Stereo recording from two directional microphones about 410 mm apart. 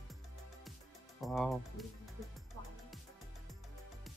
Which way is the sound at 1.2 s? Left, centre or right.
Centre.